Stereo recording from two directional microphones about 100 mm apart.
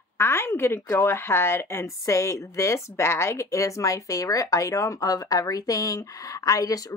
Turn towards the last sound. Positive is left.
turn(degrees=35)  # may be behind; listen again after turning